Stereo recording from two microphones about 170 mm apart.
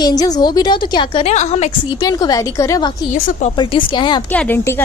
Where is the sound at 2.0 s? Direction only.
25° left (ahead or behind).